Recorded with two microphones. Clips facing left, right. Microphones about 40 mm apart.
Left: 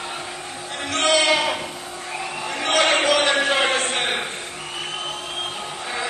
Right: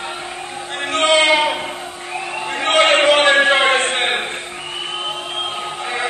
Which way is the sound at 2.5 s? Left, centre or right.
Right.